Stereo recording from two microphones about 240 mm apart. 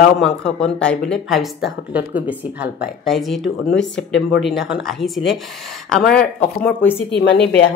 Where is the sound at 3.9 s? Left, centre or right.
Left.